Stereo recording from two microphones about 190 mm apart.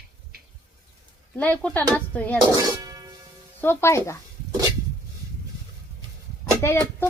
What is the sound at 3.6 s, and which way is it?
Speech, 15° left (ahead or behind).